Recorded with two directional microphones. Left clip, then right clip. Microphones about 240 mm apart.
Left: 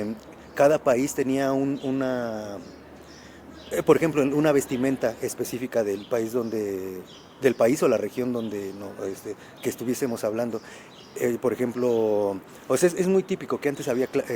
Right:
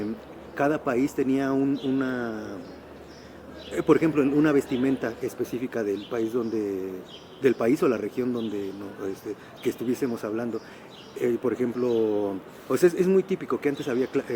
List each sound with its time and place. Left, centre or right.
0.5 s speech: left
3.7 s speech: left
9.6 s speech: left